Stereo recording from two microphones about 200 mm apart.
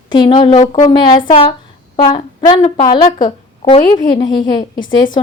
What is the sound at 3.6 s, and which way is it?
Speech, 40° left (ahead or behind).